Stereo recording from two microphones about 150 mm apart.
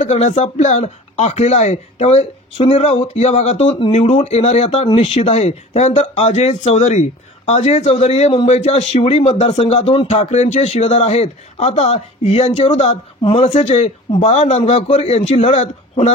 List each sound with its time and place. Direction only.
0.0 s speech: 50° left (ahead or behind)